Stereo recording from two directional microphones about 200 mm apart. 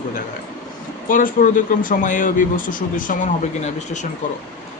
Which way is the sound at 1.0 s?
40° left (ahead or behind).